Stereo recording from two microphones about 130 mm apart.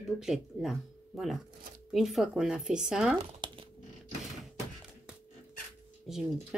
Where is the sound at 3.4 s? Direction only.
35° right (ahead or behind).